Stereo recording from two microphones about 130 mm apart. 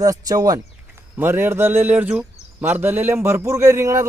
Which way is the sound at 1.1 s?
15° right (ahead or behind).